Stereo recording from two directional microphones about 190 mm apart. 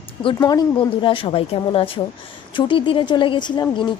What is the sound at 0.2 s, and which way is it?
A woman's voice, 25° left (ahead or behind).